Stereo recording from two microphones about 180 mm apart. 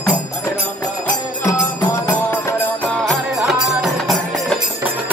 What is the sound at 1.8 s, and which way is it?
Music, 15° left (ahead or behind).